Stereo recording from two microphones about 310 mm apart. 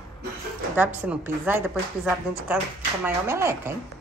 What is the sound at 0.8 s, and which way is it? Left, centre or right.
A woman's voice, centre.